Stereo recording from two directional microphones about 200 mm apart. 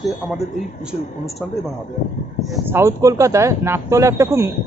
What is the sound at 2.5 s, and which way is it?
Speech, 10° right (ahead or behind).